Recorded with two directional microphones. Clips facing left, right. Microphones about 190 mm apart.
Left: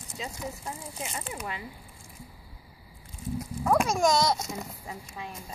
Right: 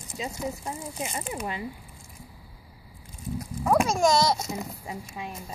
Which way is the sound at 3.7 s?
5° right (ahead or behind).